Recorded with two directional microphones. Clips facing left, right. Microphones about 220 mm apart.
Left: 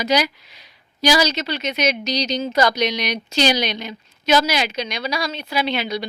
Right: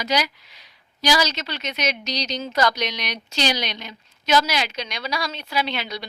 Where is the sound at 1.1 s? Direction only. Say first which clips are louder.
Left 3 dB; 5° left (ahead or behind).